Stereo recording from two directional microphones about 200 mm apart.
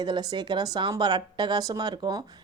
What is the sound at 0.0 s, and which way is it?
A woman's voice, 20° right (ahead or behind).